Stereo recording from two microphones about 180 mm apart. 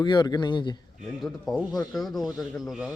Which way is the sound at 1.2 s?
Centre (ahead or behind).